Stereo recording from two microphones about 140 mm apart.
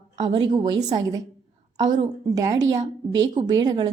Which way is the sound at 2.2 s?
25° right (ahead or behind).